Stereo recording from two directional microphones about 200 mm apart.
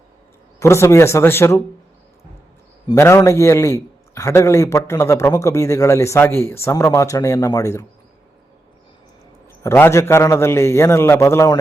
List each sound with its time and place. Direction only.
0.6 s a man's voice: 15° left (ahead or behind)
2.9 s a man's voice: 15° left (ahead or behind)
9.6 s a man's voice: 10° left (ahead or behind)